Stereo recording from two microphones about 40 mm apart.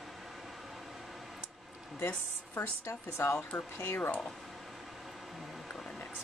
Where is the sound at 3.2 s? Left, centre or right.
Left.